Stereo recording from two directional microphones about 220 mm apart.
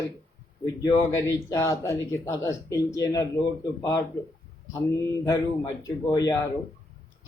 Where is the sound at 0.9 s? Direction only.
15° left (ahead or behind).